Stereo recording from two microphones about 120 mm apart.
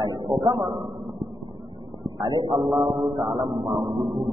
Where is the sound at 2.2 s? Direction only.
40° right (ahead or behind).